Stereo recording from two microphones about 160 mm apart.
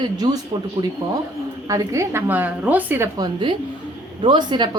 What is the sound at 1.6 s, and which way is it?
A woman's voice, 20° right (ahead or behind).